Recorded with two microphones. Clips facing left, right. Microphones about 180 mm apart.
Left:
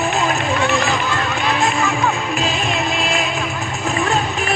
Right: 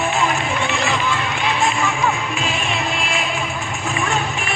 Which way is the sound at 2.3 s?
35° left (ahead or behind).